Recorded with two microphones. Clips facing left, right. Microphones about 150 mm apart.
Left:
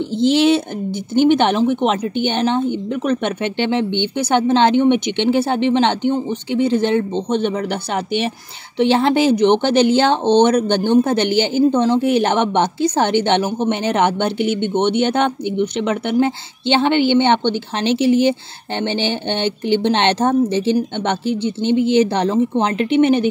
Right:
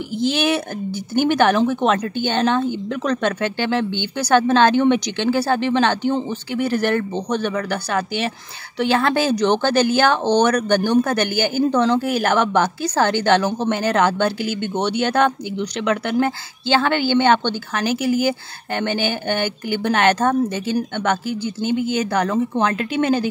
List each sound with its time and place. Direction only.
1.1 s speech: 20° left (ahead or behind)